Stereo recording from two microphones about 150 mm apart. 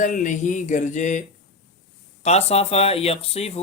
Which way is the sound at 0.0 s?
60° left (ahead or behind).